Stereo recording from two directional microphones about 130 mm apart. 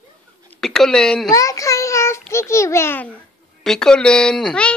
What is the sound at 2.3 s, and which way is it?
Speech, 20° left (ahead or behind).